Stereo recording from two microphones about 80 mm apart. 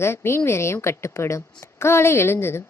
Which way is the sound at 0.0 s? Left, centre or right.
Left.